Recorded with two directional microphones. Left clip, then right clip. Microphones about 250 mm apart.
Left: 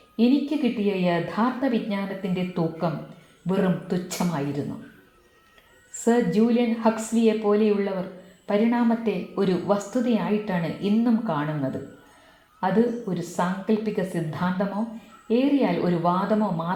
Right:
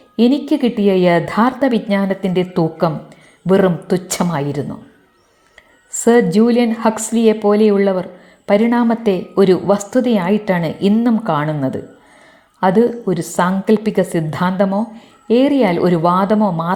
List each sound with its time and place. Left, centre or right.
0.2 s a woman's voice: right
6.1 s a woman's voice: right